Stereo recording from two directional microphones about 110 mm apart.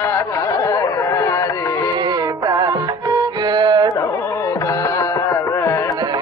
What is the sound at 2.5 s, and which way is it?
Music, 35° right (ahead or behind).